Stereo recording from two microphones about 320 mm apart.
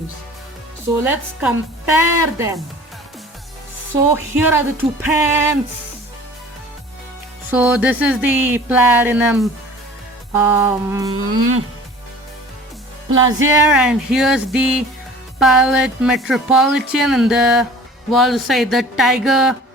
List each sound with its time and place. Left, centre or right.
1.0 s speech: centre
4.1 s speech: centre
7.5 s speech: centre
11.3 s speech: right
13.5 s speech: centre